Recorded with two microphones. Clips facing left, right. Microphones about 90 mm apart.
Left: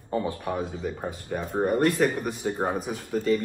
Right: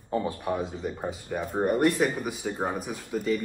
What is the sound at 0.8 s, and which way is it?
A man's voice, 5° right (ahead or behind).